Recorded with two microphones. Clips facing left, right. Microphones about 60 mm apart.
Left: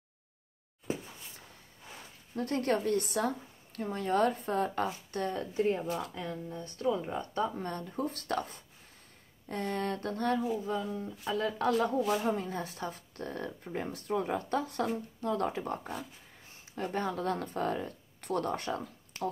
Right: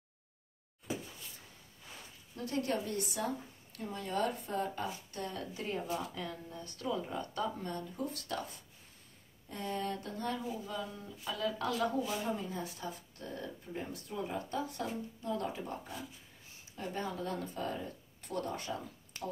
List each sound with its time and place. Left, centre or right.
2.3 s a woman's voice: left
5.5 s speech: left
7.6 s a woman's voice: left
11.2 s speech: left
12.0 s a woman's voice: left